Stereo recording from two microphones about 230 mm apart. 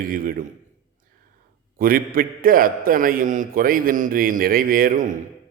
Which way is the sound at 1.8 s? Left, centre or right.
Right.